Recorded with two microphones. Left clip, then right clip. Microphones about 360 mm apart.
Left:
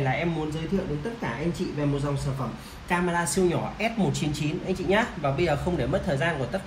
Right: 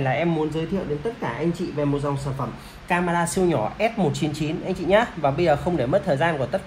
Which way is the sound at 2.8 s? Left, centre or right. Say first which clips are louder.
Right 4 dB; centre.